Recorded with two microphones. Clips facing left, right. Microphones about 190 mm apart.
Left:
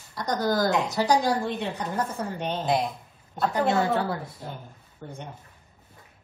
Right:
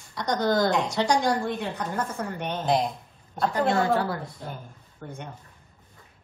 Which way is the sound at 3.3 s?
5° left (ahead or behind).